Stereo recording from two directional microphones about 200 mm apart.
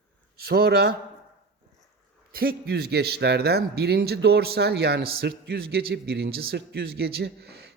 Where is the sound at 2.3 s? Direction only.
50° right (ahead or behind).